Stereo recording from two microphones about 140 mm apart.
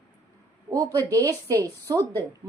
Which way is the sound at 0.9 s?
25° right (ahead or behind).